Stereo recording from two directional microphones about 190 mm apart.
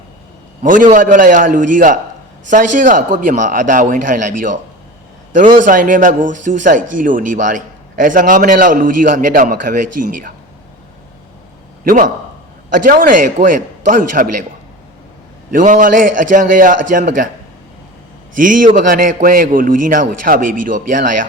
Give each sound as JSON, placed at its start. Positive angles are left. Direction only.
{"t": 0.6, "sound": "a man's voice", "side_deg": -45}
{"t": 11.9, "sound": "a man's voice", "side_deg": -45}
{"t": 15.5, "sound": "a man's voice", "side_deg": -45}
{"t": 18.3, "sound": "a man's voice", "side_deg": -45}